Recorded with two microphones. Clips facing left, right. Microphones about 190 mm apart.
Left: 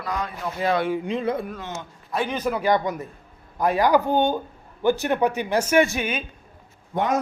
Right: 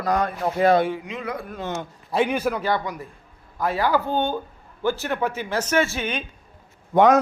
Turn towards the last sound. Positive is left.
turn(degrees=-90)